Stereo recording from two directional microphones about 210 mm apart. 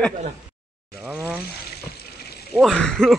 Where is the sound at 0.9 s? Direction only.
Centre (ahead or behind).